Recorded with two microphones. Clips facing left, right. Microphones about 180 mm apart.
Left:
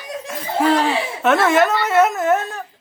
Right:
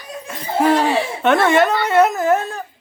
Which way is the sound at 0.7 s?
15° right (ahead or behind).